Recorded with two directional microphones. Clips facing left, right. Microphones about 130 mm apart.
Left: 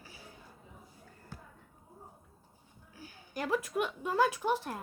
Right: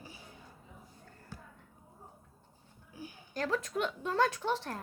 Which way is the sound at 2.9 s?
15° right (ahead or behind).